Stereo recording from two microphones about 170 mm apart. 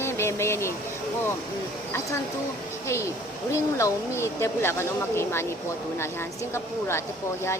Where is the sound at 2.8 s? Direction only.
15° left (ahead or behind).